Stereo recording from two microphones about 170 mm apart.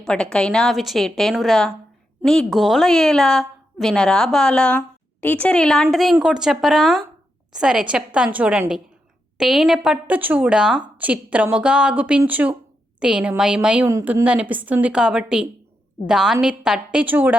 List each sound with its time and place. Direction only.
0.0 s a woman's voice: 5° left (ahead or behind)
13.8 s speech: 20° right (ahead or behind)
14.1 s a woman's voice: 10° right (ahead or behind)